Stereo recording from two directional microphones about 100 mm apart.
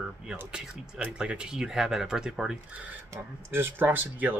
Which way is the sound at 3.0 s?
25° right (ahead or behind).